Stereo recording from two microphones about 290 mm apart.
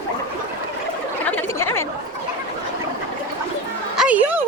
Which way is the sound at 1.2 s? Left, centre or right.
Centre.